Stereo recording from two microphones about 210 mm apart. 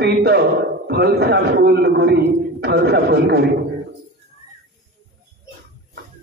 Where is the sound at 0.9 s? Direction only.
50° right (ahead or behind).